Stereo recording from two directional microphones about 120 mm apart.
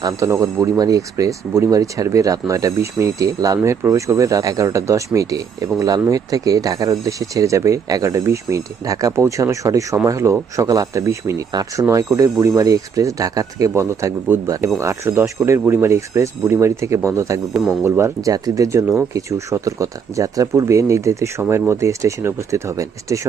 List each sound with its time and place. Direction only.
0.0 s speech: 25° right (ahead or behind)